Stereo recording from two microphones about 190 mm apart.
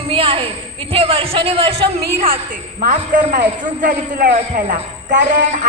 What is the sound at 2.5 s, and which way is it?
A man's voice, 40° right (ahead or behind).